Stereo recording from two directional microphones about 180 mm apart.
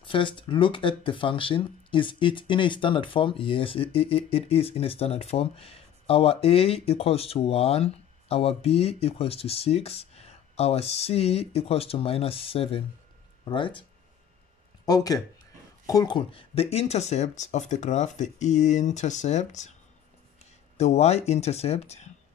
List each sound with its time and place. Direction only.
0.0 s speech: 25° left (ahead or behind)
14.9 s speech: 20° left (ahead or behind); by 19.7 s 40° left (ahead or behind)
20.7 s speech: 35° left (ahead or behind)